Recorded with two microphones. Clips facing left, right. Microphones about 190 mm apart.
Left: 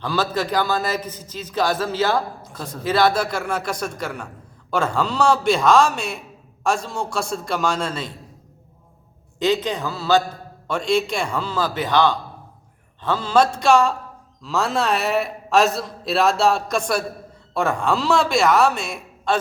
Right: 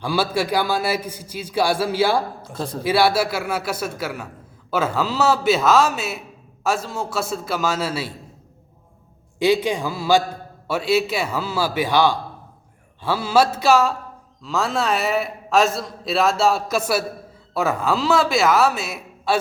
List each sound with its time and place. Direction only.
0.0 s a man's voice: 10° right (ahead or behind)
2.4 s speech: 30° right (ahead or behind)
2.8 s a man's voice: 10° right (ahead or behind)
9.4 s a man's voice: 10° right (ahead or behind)